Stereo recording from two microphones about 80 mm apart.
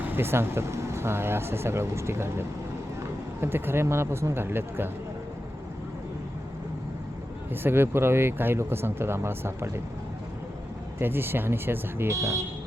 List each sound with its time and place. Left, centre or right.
0.0 s speech: right
3.4 s speech: right
7.5 s speech: right
11.0 s speech: right
12.1 s speech: right